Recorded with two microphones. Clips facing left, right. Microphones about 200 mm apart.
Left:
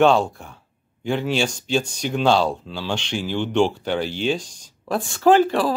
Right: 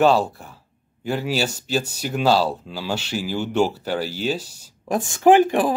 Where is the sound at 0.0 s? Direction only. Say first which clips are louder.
Left 1 dB; 5° right (ahead or behind).